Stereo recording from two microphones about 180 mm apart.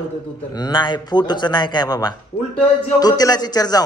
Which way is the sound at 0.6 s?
25° left (ahead or behind).